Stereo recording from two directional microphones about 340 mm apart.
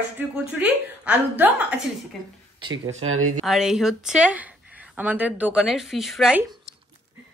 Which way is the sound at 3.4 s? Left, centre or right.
Centre.